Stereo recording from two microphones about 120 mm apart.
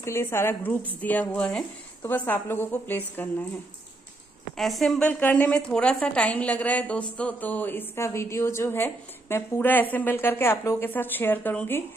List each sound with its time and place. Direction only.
0.0 s a woman's voice: 20° left (ahead or behind)
4.6 s a woman's voice: centre (ahead or behind)